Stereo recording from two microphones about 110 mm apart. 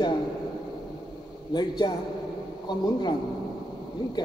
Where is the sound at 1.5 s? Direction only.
40° left (ahead or behind).